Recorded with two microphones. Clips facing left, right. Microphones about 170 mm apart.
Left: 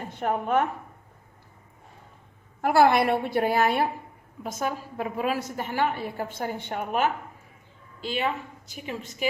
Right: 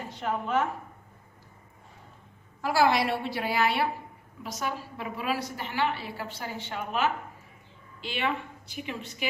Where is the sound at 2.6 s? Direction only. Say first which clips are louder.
Left 4 dB; 55° left (ahead or behind).